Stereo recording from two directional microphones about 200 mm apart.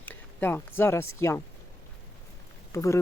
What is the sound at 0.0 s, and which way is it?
Speech, 10° left (ahead or behind).